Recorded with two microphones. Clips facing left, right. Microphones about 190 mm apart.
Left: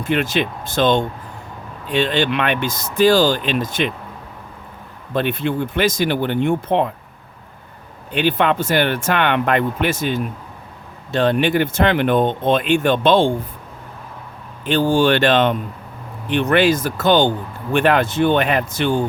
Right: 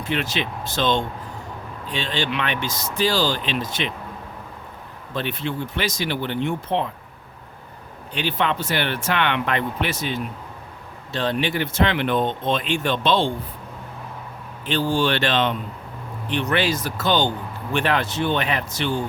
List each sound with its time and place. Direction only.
0.0 s speech: 50° left (ahead or behind)
5.1 s speech: 55° left (ahead or behind)
8.1 s speech: 55° left (ahead or behind)
14.7 s speech: 50° left (ahead or behind)